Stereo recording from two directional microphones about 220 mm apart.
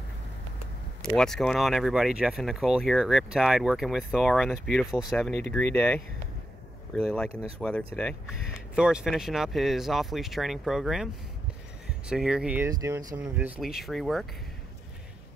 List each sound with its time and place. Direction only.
1.1 s speech: centre (ahead or behind)
7.2 s speech: 25° right (ahead or behind)
7.6 s speech: 5° left (ahead or behind)
12.1 s speech: 5° right (ahead or behind)